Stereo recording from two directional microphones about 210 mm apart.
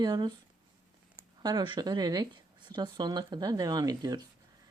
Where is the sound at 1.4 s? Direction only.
20° right (ahead or behind).